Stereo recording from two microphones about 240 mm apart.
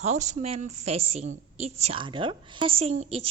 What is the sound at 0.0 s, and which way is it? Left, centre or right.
A woman's voice, right.